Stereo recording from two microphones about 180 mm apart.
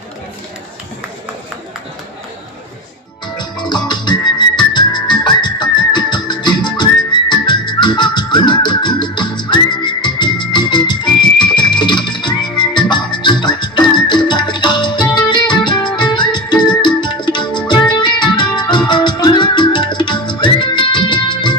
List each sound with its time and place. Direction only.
3.3 s music: 25° left (ahead or behind)